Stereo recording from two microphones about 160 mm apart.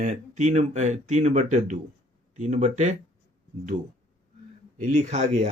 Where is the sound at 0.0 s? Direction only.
50° right (ahead or behind).